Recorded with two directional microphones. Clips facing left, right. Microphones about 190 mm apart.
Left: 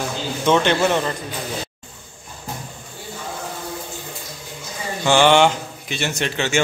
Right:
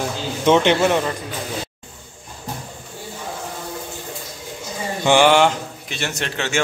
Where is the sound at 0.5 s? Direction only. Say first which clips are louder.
Right 2 dB; 15° right (ahead or behind).